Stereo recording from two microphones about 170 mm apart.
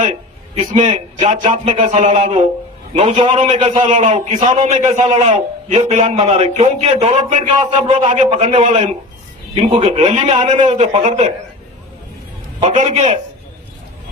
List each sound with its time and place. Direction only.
0.7 s a man's voice: 30° right (ahead or behind)
4.4 s a man's voice: 30° right (ahead or behind)
12.6 s a man's voice: 40° right (ahead or behind)